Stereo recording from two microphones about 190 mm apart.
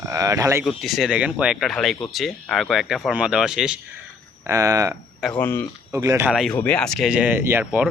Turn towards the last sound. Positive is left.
turn(degrees=-10)  # may be behind; listen again after turning